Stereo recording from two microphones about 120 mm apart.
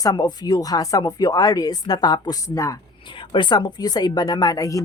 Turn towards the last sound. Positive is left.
turn(degrees=30)  # may be behind; listen again after turning